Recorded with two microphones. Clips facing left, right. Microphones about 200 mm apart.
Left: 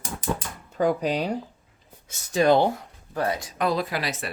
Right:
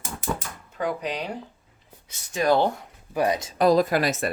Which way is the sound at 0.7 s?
40° left (ahead or behind).